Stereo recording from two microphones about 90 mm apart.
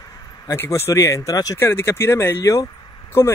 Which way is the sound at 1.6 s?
30° left (ahead or behind).